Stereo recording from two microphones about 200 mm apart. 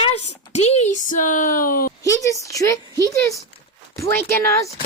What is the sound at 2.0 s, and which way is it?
Speech, 15° left (ahead or behind).